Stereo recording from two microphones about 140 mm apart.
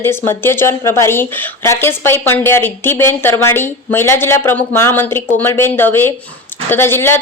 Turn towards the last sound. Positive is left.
turn(degrees=15)  # may be behind; listen again after turning